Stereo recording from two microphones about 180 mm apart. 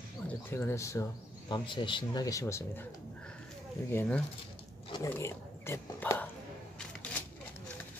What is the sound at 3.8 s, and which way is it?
Speech, 10° left (ahead or behind).